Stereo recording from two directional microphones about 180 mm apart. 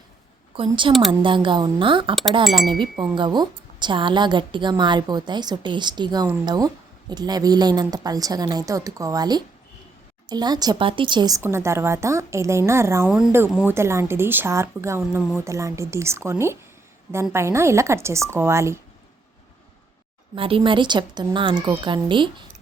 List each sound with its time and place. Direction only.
0.5 s a woman's voice: 30° right (ahead or behind)
2.4 s speech: centre (ahead or behind)
3.2 s a woman's voice: 25° right (ahead or behind)
20.3 s a woman's voice: 30° right (ahead or behind)